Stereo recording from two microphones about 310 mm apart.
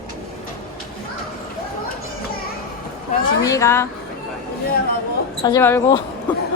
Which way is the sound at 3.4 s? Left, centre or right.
Centre.